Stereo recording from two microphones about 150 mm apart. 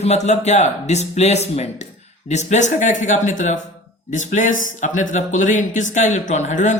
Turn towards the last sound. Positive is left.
turn(degrees=55)  # may be behind; listen again after turning